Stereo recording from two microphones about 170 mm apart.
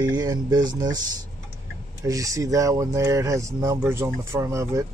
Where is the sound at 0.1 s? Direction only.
25° right (ahead or behind).